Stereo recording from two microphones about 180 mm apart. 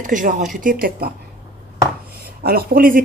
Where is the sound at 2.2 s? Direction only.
55° right (ahead or behind).